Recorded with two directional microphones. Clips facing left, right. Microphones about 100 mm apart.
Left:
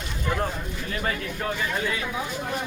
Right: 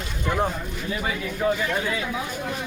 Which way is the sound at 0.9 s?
10° right (ahead or behind).